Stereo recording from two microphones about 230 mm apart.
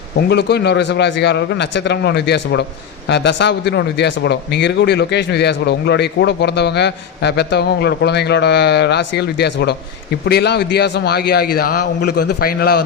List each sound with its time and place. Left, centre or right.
0.2 s speech: left